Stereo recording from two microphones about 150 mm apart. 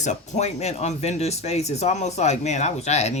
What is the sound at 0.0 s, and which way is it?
Speech, 50° left (ahead or behind).